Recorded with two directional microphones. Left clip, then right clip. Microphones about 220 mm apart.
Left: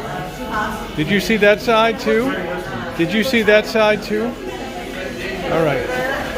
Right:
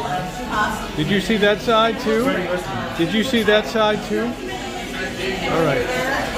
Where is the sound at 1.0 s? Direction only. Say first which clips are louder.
Left 4 dB; 10° left (ahead or behind).